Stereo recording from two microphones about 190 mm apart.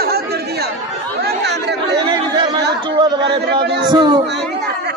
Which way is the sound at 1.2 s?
60° right (ahead or behind).